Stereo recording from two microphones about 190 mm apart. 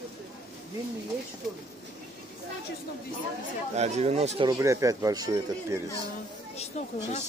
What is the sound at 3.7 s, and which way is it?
Speech, 35° right (ahead or behind).